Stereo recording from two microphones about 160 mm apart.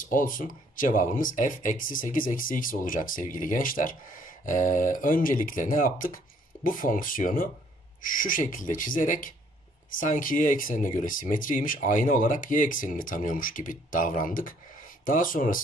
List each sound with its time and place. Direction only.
0.0 s speech: 60° left (ahead or behind)